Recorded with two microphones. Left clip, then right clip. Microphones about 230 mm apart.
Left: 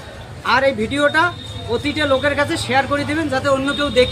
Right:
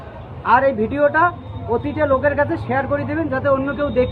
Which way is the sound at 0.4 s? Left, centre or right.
Left.